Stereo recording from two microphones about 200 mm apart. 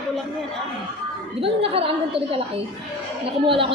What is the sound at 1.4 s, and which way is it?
A woman's voice, 30° right (ahead or behind).